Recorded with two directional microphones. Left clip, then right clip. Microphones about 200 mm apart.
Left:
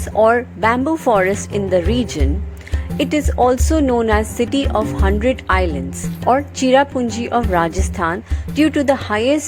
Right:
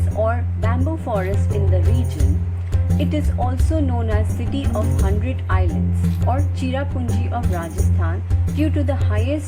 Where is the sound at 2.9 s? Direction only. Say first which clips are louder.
Left 9 dB; 45° left (ahead or behind).